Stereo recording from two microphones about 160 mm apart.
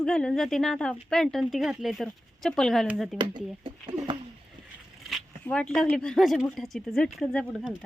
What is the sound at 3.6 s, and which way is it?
Speech, 30° right (ahead or behind).